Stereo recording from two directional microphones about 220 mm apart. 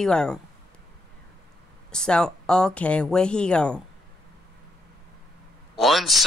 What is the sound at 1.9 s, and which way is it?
Speech, 5° left (ahead or behind).